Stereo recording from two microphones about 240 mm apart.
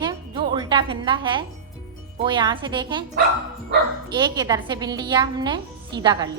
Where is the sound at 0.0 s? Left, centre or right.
Centre.